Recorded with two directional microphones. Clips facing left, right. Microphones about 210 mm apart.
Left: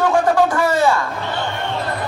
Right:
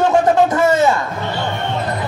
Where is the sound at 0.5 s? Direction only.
20° right (ahead or behind).